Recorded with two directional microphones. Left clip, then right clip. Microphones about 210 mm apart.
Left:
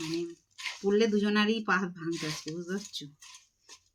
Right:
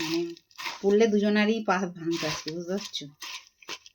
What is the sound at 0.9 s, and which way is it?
Speech, 15° left (ahead or behind).